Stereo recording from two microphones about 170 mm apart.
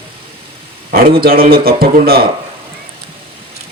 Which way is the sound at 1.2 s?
60° right (ahead or behind).